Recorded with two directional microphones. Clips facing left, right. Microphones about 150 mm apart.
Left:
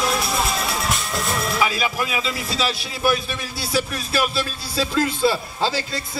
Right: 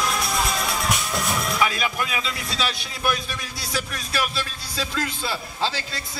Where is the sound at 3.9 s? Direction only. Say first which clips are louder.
Left 5 dB; 30° left (ahead or behind).